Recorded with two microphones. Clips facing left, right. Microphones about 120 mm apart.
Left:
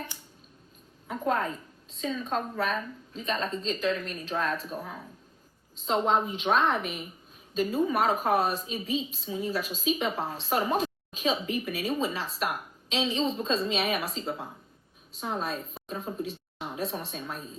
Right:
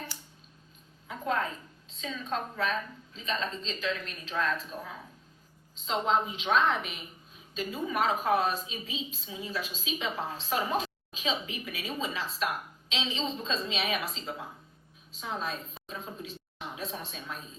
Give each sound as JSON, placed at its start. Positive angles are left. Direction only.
{"t": 1.0, "sound": "a woman's voice", "side_deg": 45}